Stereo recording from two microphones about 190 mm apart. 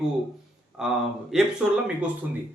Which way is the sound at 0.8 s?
5° right (ahead or behind).